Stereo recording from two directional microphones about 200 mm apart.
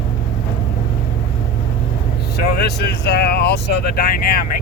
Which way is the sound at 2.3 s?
50° left (ahead or behind).